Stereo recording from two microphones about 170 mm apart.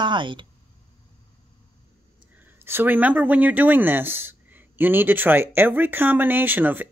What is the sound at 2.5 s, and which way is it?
Speech, 15° right (ahead or behind).